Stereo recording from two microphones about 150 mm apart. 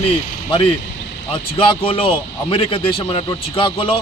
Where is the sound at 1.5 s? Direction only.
35° left (ahead or behind).